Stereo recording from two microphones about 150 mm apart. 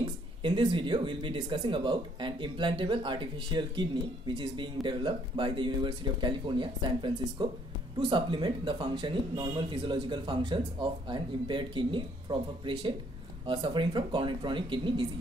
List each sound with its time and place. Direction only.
0.0 s speech: 35° right (ahead or behind)